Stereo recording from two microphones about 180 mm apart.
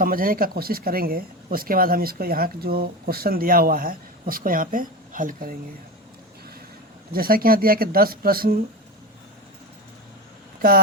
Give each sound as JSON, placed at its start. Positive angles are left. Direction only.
{"t": 0.0, "sound": "speech", "side_deg": -55}
{"t": 7.1, "sound": "speech", "side_deg": -55}